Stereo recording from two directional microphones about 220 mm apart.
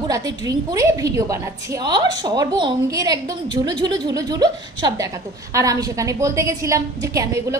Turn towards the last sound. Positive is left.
turn(degrees=-15)  # may be behind; listen again after turning